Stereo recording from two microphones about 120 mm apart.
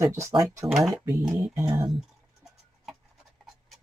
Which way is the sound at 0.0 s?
20° right (ahead or behind).